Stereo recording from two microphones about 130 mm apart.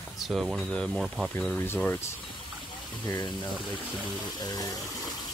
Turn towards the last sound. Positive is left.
turn(degrees=30)  # may be behind; listen again after turning